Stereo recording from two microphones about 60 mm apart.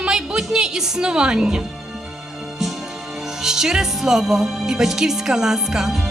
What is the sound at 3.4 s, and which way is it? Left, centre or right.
Speech, centre.